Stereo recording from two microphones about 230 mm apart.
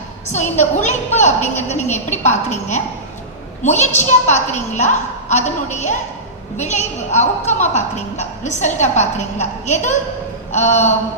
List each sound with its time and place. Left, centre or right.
0.3 s a woman's voice: left